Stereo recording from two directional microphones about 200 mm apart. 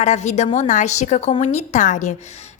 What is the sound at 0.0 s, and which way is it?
A woman's voice, 35° left (ahead or behind).